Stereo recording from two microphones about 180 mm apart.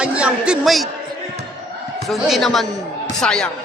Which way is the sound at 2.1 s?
Centre (ahead or behind).